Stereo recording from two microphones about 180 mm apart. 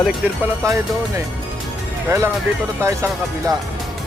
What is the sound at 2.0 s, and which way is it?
Speech, 15° right (ahead or behind).